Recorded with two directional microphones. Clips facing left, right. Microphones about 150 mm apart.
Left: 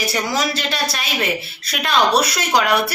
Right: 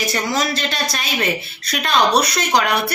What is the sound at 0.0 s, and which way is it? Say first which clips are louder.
A man's voice: even; 10° left (ahead or behind).